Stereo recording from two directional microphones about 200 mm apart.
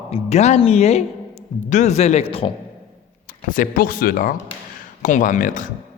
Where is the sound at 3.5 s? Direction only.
45° left (ahead or behind).